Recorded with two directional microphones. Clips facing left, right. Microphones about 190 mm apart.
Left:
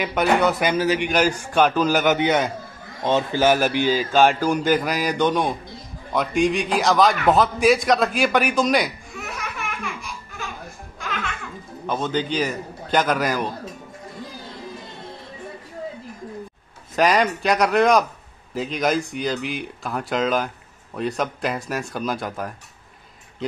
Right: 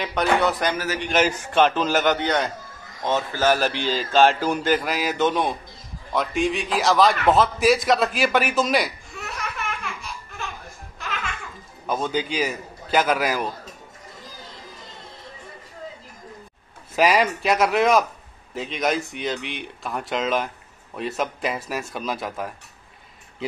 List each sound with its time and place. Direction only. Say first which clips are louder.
0.0 s speech: left 2 dB; 5° left (ahead or behind)
0.7 s a man's voice: left 7 dB; 15° left (ahead or behind)
1.5 s a man's voice: left 1 dB; centre (ahead or behind)
11.9 s a man's voice: left 1 dB; 10° right (ahead or behind)
16.9 s speech: left 1 dB; 5° right (ahead or behind)